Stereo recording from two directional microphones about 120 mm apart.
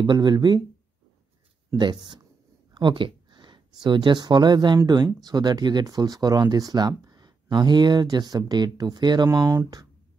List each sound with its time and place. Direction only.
0.0 s speech: 40° right (ahead or behind)
1.8 s speech: 40° right (ahead or behind)